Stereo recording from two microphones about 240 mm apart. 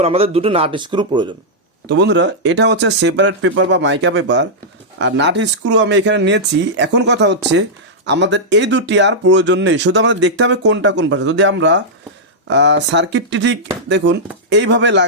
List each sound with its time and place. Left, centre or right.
0.0 s speech: right
1.9 s speech: right